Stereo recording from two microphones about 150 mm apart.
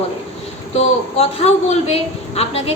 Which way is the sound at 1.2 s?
40° left (ahead or behind).